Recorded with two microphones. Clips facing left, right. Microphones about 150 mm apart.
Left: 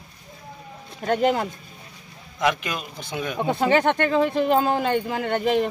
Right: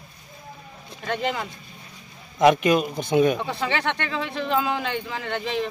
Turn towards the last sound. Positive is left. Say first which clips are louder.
# left 6 dB
turn(degrees=50)  # may be behind; listen again after turning